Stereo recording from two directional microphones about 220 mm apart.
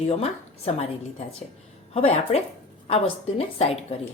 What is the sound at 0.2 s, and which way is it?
Speech, 25° left (ahead or behind).